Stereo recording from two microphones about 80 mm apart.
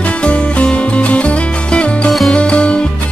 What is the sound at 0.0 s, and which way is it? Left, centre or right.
Music, centre.